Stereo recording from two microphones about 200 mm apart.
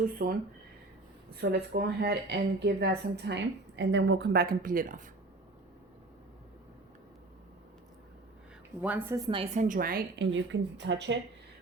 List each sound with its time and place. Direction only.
0.2 s speech: 50° right (ahead or behind)
8.8 s a woman's voice: 10° right (ahead or behind); by 10.2 s 45° right (ahead or behind)
10.3 s speech: 65° right (ahead or behind)